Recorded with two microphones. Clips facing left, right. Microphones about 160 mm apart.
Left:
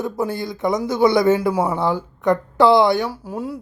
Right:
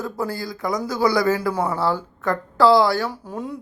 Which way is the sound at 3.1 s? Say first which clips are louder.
Left 2 dB; 5° left (ahead or behind).